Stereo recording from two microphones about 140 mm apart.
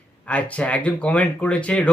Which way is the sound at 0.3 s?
10° left (ahead or behind).